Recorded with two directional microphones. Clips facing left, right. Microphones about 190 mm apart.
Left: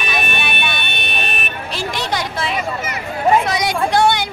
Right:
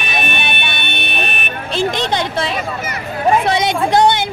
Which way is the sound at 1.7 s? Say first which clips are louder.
Right 6 dB; 20° right (ahead or behind).